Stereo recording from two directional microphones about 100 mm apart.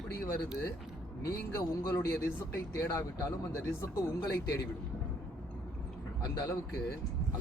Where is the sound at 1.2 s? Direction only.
30° left (ahead or behind).